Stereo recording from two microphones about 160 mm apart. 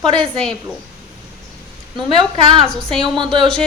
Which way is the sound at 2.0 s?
30° right (ahead or behind).